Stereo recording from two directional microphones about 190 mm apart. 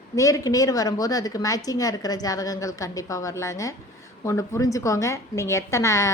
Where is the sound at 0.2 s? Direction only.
15° left (ahead or behind).